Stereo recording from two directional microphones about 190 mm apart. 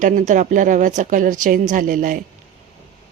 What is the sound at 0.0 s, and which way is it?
Speech, 40° right (ahead or behind).